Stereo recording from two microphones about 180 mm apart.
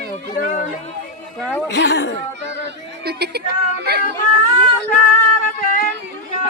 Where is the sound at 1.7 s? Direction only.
75° left (ahead or behind).